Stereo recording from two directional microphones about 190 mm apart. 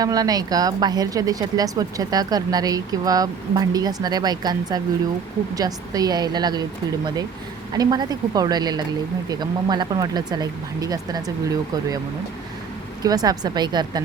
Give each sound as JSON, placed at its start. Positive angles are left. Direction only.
{"t": 0.0, "sound": "speech", "side_deg": -20}
{"t": 13.0, "sound": "speech", "side_deg": -20}